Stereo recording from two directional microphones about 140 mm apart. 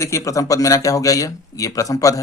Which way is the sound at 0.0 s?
20° left (ahead or behind).